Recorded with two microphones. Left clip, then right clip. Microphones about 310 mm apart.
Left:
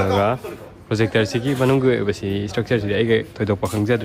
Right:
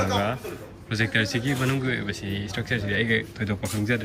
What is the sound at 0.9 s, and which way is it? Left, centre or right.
Speech, centre.